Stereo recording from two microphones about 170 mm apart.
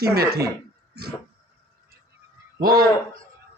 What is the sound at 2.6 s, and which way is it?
Speech, 60° right (ahead or behind).